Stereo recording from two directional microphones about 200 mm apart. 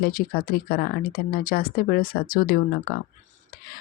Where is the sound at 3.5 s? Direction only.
50° left (ahead or behind).